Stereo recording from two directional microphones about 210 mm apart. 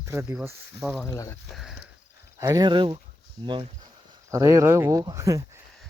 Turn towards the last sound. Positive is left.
turn(degrees=-15)  # may be behind; listen again after turning